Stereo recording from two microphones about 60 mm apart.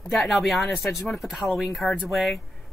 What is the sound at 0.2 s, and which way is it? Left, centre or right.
Speech, centre.